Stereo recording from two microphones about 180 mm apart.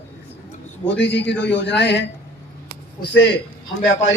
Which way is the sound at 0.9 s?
75° left (ahead or behind).